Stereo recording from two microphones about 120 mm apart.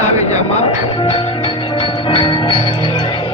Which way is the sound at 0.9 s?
60° left (ahead or behind).